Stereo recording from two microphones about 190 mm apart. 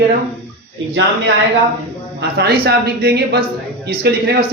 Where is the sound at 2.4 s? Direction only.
60° right (ahead or behind).